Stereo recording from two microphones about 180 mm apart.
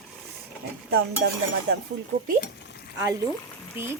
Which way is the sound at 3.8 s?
10° right (ahead or behind).